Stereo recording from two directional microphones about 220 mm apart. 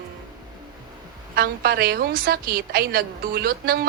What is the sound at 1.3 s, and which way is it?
A woman's voice, 45° right (ahead or behind).